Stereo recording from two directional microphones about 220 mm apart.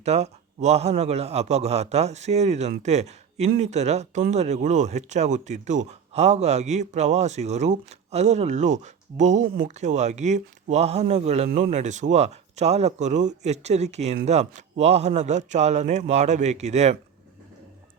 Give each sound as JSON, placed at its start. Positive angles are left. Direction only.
{"t": 0.0, "sound": "a man's voice", "side_deg": -30}